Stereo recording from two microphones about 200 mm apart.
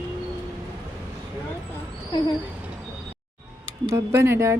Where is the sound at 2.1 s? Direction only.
20° left (ahead or behind).